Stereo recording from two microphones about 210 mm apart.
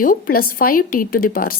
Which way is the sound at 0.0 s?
45° left (ahead or behind).